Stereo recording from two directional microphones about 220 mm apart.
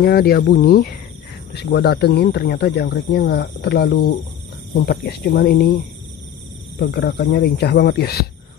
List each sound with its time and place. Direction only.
0.0 s speech: 45° left (ahead or behind)
6.8 s speech: 45° left (ahead or behind)